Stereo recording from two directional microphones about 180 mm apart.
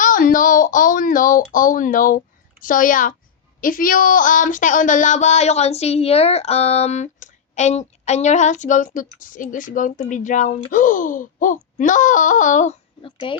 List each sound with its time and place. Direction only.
0.0 s speech: 50° left (ahead or behind)
3.6 s a sound: 50° left (ahead or behind)
13.0 s speech: 30° left (ahead or behind)